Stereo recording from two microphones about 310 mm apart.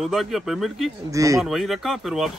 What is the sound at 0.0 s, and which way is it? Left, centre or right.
Speech, centre.